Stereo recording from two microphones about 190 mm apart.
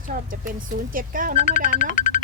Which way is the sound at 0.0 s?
45° right (ahead or behind).